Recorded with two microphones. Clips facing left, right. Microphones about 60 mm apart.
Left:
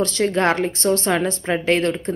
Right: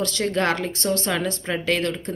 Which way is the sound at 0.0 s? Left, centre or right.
Left.